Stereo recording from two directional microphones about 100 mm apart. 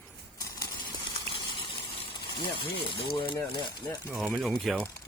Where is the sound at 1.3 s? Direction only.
60° left (ahead or behind).